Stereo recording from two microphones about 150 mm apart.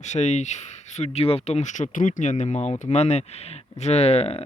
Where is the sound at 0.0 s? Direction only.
50° left (ahead or behind).